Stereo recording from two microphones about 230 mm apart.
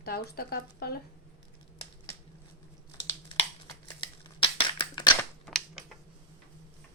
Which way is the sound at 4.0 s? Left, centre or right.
Left.